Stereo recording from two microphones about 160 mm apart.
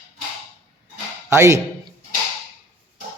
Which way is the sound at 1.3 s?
20° right (ahead or behind).